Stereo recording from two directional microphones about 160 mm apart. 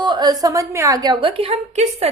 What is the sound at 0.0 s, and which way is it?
A woman's voice, 25° right (ahead or behind).